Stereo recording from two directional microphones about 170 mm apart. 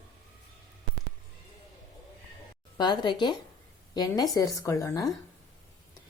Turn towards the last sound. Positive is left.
turn(degrees=20)  # may be behind; listen again after turning